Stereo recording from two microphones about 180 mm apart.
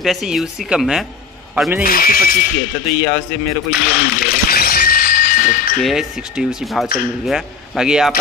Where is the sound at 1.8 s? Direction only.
55° left (ahead or behind).